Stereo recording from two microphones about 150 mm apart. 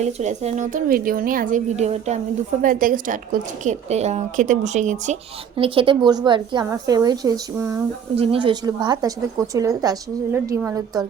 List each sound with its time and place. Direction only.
0.0 s speech: 50° right (ahead or behind)
0.9 s a woman's voice: 75° right (ahead or behind)
3.6 s speech: 50° right (ahead or behind)
5.5 s a woman's voice: 35° right (ahead or behind)
8.1 s a woman's voice: 40° right (ahead or behind); by 11.0 s 20° right (ahead or behind)